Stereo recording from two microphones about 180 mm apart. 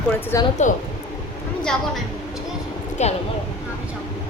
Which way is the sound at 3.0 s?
40° left (ahead or behind).